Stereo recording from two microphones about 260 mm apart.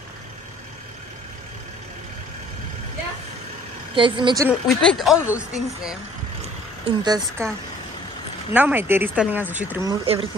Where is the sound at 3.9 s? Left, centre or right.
Centre.